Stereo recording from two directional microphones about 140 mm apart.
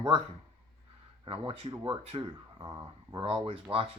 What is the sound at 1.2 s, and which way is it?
Speech, 40° right (ahead or behind).